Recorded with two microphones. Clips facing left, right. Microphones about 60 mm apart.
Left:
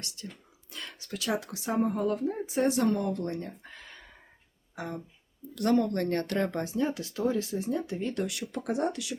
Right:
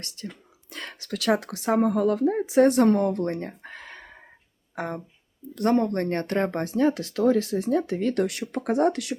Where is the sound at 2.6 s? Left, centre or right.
Right.